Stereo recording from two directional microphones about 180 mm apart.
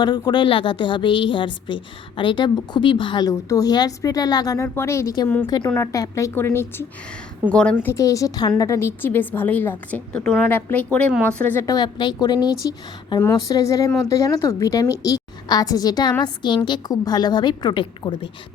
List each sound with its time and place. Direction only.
0.0 s a woman's voice: 25° left (ahead or behind); by 11.6 s 10° left (ahead or behind)
11.6 s a woman's voice: 20° left (ahead or behind)